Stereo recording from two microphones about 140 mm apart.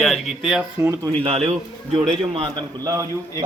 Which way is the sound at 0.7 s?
20° right (ahead or behind).